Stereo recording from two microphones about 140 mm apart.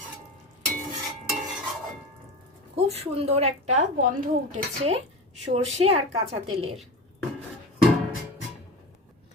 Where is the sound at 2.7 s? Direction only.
50° right (ahead or behind).